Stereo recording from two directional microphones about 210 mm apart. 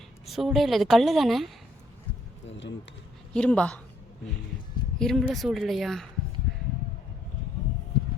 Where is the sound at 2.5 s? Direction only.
60° left (ahead or behind).